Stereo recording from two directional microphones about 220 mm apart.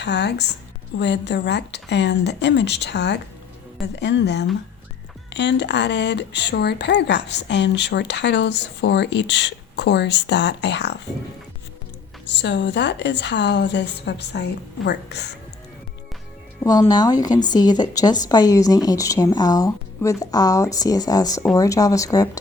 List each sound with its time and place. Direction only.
0.0 s speech: 50° left (ahead or behind)
12.3 s speech: 50° left (ahead or behind)
16.6 s a woman's voice: 15° left (ahead or behind)